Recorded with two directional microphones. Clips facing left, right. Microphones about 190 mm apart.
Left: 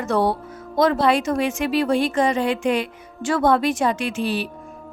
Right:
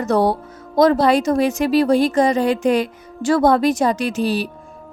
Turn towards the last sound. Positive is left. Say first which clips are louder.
# right 4 dB
turn(degrees=-40)  # may be behind; listen again after turning